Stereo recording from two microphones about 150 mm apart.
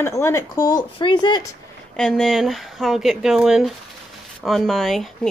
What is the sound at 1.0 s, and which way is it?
Speech, 30° left (ahead or behind).